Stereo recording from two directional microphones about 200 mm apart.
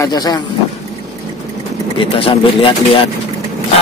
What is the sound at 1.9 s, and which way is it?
Speech, 25° left (ahead or behind).